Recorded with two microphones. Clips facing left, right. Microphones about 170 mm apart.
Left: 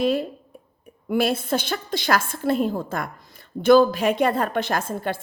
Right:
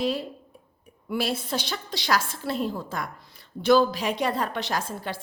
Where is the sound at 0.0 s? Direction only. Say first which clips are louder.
Left 5 dB; 50° left (ahead or behind).